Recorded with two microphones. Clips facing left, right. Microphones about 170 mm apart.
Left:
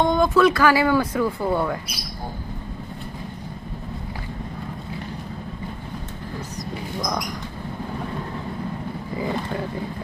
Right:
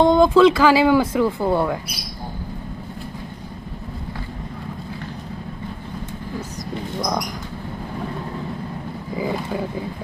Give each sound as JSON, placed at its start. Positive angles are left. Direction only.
{"t": 0.0, "sound": "speech", "side_deg": -30}
{"t": 0.6, "sound": "speech", "side_deg": -15}
{"t": 7.0, "sound": "speech", "side_deg": -15}
{"t": 9.2, "sound": "speech", "side_deg": -10}